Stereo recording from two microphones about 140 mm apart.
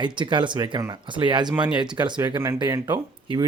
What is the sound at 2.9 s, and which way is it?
Speech, 35° right (ahead or behind).